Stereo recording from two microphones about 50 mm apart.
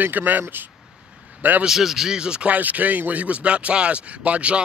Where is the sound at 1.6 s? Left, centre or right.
Centre.